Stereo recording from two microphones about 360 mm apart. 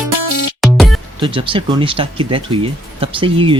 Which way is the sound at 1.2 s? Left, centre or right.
Centre.